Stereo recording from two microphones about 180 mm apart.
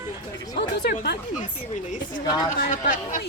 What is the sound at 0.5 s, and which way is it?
Speech, 55° left (ahead or behind).